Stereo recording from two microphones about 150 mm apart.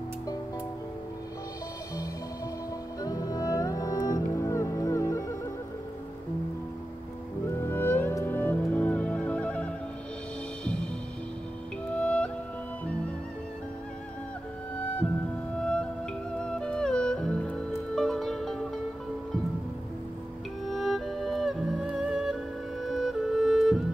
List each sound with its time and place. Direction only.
3.0 s music: 25° left (ahead or behind)
7.4 s music: 15° left (ahead or behind)
11.9 s music: 10° left (ahead or behind)
15.5 s music: 5° left (ahead or behind)
20.6 s music: centre (ahead or behind)